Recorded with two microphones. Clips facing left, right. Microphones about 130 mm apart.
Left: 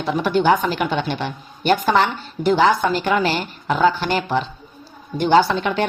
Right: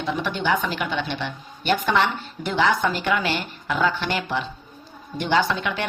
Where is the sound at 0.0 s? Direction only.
40° left (ahead or behind).